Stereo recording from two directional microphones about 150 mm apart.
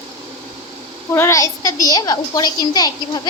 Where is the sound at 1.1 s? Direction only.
20° left (ahead or behind).